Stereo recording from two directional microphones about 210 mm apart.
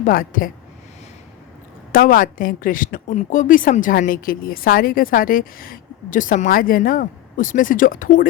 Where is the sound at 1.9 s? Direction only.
40° left (ahead or behind).